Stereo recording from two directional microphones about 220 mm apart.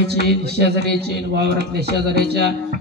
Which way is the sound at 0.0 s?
50° right (ahead or behind).